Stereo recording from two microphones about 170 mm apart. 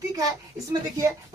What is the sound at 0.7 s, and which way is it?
Speech, 20° right (ahead or behind).